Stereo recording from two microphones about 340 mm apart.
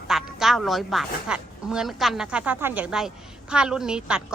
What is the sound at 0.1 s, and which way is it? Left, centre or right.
A woman's voice, centre.